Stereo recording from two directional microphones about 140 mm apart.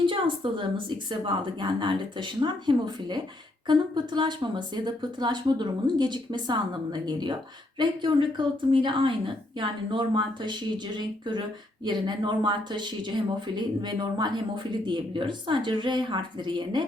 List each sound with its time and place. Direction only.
0.0 s a woman's voice: 35° right (ahead or behind)